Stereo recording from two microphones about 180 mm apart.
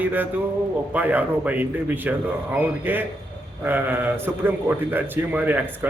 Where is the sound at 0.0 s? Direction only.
10° right (ahead or behind).